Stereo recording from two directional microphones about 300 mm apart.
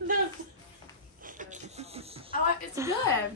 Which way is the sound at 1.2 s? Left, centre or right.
Right.